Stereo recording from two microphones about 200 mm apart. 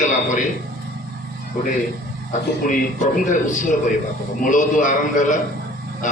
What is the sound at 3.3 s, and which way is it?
A man's voice, 40° left (ahead or behind).